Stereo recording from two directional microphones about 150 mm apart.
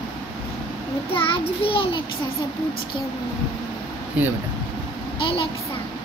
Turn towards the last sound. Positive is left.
turn(degrees=35)  # may be behind; listen again after turning